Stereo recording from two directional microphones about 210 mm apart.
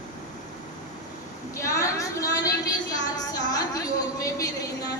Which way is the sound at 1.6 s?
15° left (ahead or behind).